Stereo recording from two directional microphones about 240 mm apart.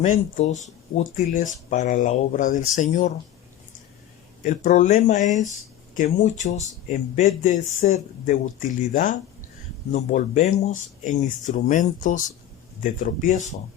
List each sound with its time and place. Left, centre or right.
0.0 s speech: left
4.4 s speech: left